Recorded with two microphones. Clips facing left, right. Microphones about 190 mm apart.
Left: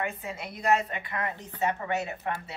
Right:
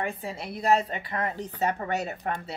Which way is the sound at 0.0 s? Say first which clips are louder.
Right 2 dB; 35° right (ahead or behind).